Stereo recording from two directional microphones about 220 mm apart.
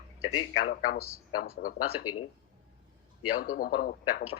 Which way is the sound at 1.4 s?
40° left (ahead or behind).